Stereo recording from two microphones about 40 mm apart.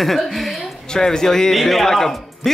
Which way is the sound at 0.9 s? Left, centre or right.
Centre.